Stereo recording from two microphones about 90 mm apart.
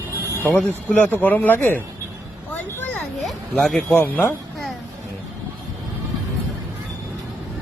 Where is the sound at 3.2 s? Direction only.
Centre (ahead or behind).